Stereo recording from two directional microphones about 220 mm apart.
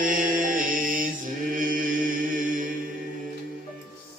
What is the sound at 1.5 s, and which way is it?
Mantra, 35° right (ahead or behind).